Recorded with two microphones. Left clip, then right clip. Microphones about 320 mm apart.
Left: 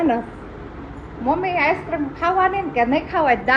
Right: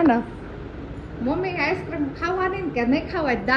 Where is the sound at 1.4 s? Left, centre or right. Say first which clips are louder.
Left 4 dB; centre.